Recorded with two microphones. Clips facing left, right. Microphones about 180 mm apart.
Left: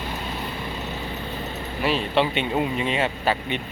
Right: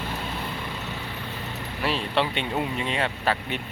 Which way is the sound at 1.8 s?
Centre (ahead or behind).